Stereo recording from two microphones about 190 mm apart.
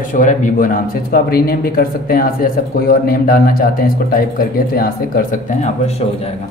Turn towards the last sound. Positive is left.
turn(degrees=45)  # may be behind; listen again after turning